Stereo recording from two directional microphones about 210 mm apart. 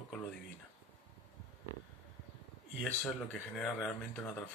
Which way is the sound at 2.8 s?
5° left (ahead or behind).